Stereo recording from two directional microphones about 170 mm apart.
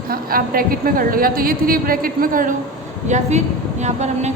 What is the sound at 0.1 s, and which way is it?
A woman's voice, 60° right (ahead or behind).